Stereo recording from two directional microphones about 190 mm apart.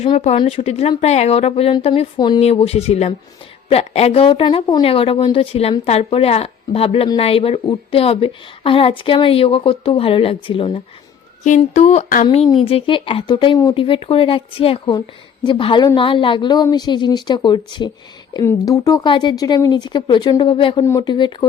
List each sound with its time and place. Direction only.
0.0 s a woman's voice: 35° left (ahead or behind)
11.4 s a woman's voice: 40° left (ahead or behind); by 21.3 s 25° left (ahead or behind)